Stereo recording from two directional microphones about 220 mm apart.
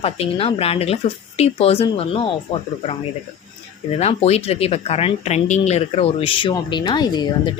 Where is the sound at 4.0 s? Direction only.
30° left (ahead or behind).